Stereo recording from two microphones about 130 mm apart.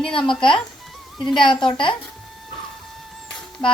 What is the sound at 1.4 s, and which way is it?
Speech, 40° left (ahead or behind).